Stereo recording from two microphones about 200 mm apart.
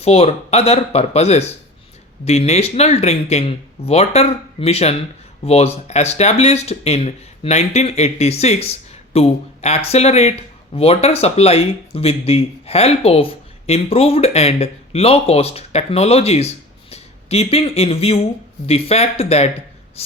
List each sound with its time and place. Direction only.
0.0 s speech: 30° left (ahead or behind)